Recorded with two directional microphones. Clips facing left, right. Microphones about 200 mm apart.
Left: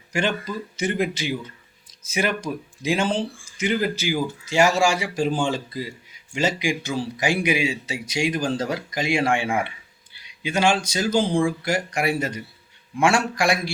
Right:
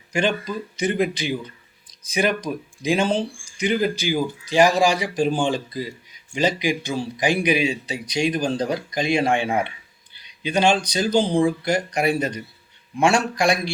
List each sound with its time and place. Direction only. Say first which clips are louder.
0.1 s speech: right 2 dB; 20° right (ahead or behind)